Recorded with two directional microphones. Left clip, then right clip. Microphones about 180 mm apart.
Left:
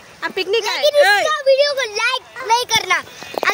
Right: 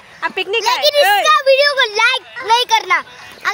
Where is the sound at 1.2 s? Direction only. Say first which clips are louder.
Right 4 dB; 45° right (ahead or behind); by 3.0 s 30° right (ahead or behind).